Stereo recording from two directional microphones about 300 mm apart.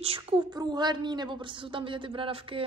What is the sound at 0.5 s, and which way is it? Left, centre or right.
A woman's voice, centre.